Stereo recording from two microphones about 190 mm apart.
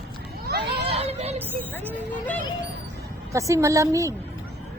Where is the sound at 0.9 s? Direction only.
30° right (ahead or behind).